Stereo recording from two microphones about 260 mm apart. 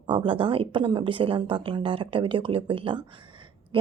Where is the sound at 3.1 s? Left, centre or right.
Centre.